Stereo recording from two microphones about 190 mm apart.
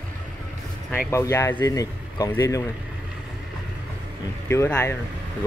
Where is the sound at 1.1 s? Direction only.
15° left (ahead or behind).